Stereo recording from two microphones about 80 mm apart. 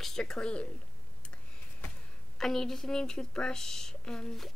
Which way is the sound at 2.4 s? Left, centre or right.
Centre.